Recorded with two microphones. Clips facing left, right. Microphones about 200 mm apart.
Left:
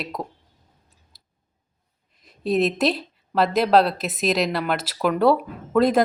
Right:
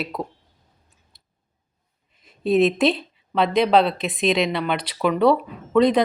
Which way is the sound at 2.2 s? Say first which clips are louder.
Right 3 dB; centre (ahead or behind).